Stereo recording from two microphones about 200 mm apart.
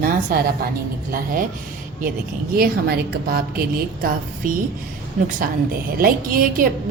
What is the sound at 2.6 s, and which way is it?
A woman's voice, 50° right (ahead or behind).